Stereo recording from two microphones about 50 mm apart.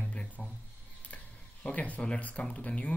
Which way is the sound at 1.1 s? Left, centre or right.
Left.